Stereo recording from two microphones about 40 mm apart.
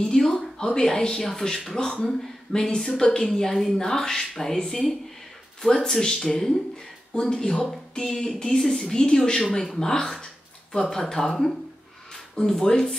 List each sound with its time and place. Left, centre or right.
0.0 s speech: centre
6.0 s speech: centre